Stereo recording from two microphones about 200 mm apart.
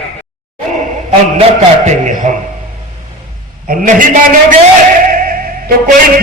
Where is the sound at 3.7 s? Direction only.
40° right (ahead or behind).